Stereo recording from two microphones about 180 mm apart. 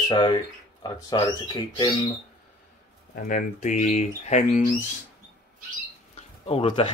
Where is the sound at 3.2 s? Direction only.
45° left (ahead or behind).